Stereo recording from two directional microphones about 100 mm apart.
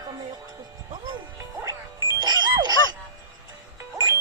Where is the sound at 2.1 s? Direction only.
45° right (ahead or behind).